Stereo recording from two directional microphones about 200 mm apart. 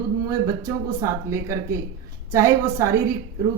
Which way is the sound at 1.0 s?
15° right (ahead or behind).